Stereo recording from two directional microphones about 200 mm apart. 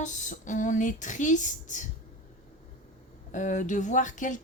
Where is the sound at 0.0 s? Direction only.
40° left (ahead or behind).